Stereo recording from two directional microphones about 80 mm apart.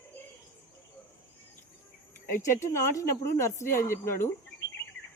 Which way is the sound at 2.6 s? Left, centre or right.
Left.